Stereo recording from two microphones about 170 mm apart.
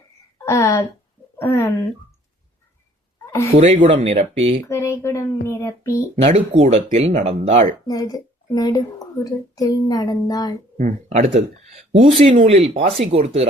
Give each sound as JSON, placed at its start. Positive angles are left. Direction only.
{"t": 0.4, "sound": "a woman's voice", "side_deg": 15}
{"t": 3.6, "sound": "speech", "side_deg": -45}
{"t": 3.8, "sound": "speech", "side_deg": -35}
{"t": 4.6, "sound": "speech", "side_deg": 15}
{"t": 6.2, "sound": "speech", "side_deg": -40}
{"t": 7.9, "sound": "speech", "side_deg": 20}
{"t": 10.8, "sound": "speech", "side_deg": -45}